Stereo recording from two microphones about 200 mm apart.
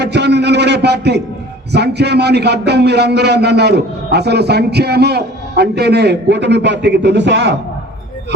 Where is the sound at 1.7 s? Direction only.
55° right (ahead or behind).